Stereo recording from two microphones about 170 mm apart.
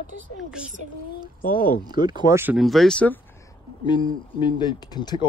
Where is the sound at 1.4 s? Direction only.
55° left (ahead or behind).